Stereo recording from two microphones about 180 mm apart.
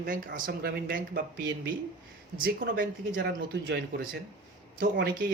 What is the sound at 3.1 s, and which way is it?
Speech, 80° right.